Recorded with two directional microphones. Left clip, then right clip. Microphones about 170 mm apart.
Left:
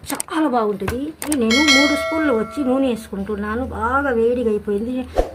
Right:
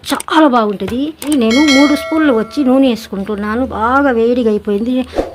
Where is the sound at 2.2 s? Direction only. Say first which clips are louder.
Right 6 dB; 35° right (ahead or behind).